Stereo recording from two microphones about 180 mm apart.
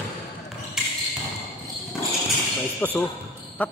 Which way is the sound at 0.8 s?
Centre (ahead or behind).